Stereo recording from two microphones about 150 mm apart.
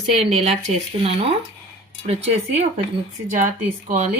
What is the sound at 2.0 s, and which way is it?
Speech, 45° right (ahead or behind).